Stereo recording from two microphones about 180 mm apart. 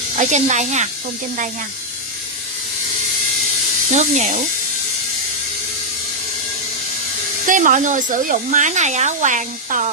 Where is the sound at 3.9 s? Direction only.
40° right (ahead or behind).